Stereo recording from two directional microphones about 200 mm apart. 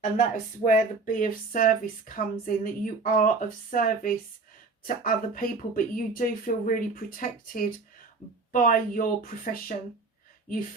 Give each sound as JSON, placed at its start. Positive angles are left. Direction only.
{"t": 0.0, "sound": "speech", "side_deg": 40}